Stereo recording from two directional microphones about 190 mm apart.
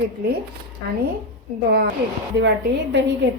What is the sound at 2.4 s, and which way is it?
Speech, 65° right (ahead or behind).